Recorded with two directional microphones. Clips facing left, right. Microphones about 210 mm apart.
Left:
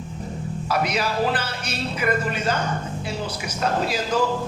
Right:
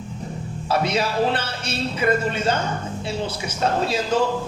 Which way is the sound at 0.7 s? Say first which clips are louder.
Right 2 dB; 25° right (ahead or behind).